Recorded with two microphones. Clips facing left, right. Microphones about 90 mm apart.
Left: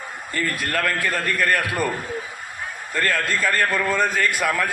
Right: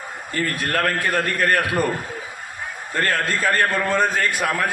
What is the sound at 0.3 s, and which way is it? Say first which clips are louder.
A man's voice: right 2 dB; 40° right (ahead or behind).